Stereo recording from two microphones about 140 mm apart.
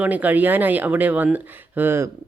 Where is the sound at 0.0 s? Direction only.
10° right (ahead or behind).